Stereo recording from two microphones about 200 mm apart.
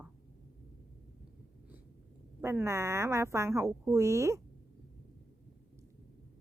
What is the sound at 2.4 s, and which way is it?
Speech, 15° right (ahead or behind).